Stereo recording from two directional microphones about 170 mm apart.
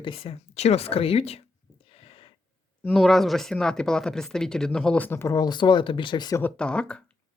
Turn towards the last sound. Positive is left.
turn(degrees=5)  # may be behind; listen again after turning